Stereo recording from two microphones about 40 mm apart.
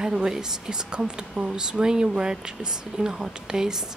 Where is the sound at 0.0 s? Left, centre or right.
Centre.